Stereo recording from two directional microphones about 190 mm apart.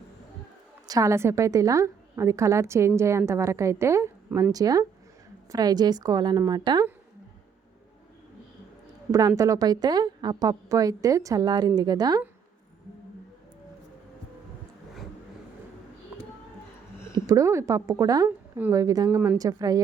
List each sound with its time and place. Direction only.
0.9 s a woman's voice: 15° right (ahead or behind)
9.1 s a woman's voice: 15° right (ahead or behind)
17.2 s a woman's voice: 20° right (ahead or behind)